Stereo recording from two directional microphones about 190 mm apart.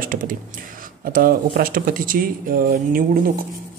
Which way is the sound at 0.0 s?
45° right (ahead or behind).